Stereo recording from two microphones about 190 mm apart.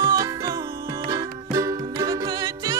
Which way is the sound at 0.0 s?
20° right (ahead or behind).